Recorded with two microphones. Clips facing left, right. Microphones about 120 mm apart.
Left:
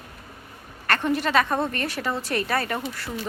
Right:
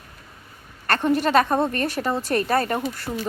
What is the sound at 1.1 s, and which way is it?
Speech, 40° right (ahead or behind).